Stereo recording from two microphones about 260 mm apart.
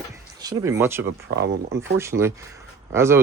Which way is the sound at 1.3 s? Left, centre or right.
Right.